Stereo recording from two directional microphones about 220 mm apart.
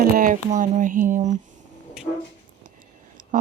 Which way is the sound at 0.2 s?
35° right (ahead or behind).